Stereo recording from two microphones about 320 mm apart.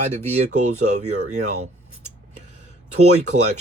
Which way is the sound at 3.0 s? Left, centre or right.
Right.